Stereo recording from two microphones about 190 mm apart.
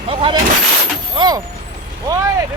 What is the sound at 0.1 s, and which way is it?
Speech, 30° right (ahead or behind).